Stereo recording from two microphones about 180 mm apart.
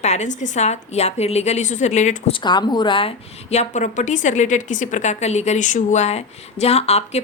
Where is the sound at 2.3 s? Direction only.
25° left (ahead or behind).